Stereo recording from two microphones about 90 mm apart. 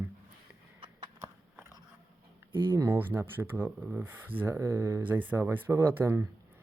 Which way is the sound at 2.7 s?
25° right (ahead or behind).